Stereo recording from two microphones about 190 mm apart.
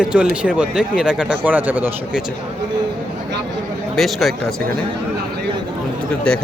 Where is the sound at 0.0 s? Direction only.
5° right (ahead or behind).